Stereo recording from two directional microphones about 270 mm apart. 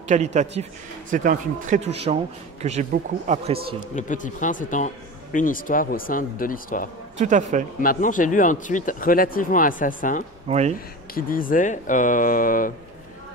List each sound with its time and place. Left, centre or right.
0.1 s speech: right
3.9 s a man's voice: left
7.2 s speech: right
7.8 s speech: left
10.5 s speech: right
11.1 s a man's voice: left